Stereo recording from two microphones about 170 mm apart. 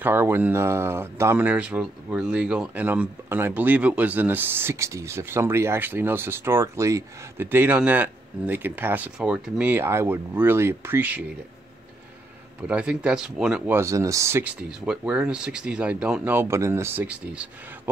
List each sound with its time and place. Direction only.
0.0 s speech: 10° right (ahead or behind)
12.6 s speech: 5° right (ahead or behind)
13.7 s speech: 15° right (ahead or behind)
14.7 s speech: 5° right (ahead or behind)